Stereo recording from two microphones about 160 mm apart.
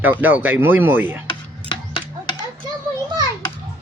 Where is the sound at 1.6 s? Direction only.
30° left (ahead or behind).